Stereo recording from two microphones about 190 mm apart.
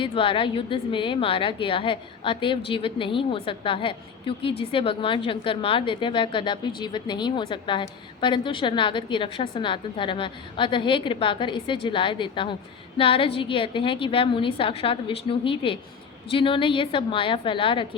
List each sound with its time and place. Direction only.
0.0 s a woman's voice: 25° left (ahead or behind)